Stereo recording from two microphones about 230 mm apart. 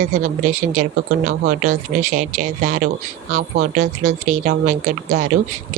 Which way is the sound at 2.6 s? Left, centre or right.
Right.